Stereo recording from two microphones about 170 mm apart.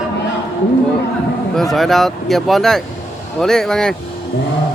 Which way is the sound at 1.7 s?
Centre (ahead or behind).